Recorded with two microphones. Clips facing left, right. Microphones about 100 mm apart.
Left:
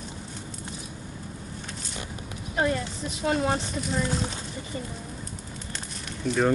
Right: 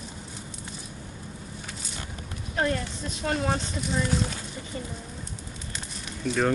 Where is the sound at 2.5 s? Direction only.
5° left (ahead or behind).